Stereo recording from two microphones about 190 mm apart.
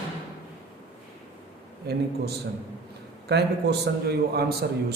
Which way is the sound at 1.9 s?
60° right (ahead or behind).